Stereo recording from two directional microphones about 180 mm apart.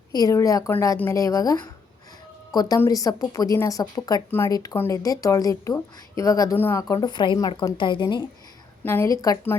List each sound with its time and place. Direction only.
0.1 s speech: 20° left (ahead or behind)
8.8 s a woman's voice: 10° left (ahead or behind)